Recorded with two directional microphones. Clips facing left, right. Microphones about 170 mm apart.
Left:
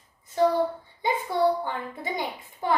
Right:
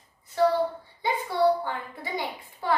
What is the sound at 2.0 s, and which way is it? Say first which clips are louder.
Speech: left 1 dB; 20° left (ahead or behind).